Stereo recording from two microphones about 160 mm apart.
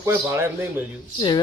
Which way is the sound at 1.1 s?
25° left (ahead or behind).